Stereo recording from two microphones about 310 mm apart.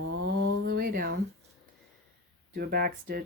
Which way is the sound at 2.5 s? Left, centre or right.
Right.